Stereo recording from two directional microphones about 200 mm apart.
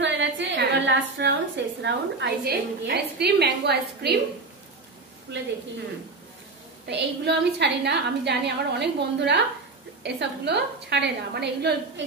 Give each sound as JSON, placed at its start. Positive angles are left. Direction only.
{"t": 0.0, "sound": "a sound", "side_deg": -65}
{"t": 1.8, "sound": "a woman's voice", "side_deg": -60}
{"t": 5.3, "sound": "a woman's voice", "side_deg": -60}
{"t": 6.9, "sound": "a woman's voice", "side_deg": -60}